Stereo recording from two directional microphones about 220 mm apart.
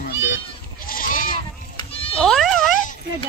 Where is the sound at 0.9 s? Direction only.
40° left (ahead or behind).